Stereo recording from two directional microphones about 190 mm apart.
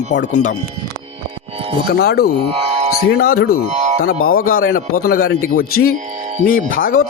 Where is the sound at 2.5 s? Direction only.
35° right (ahead or behind).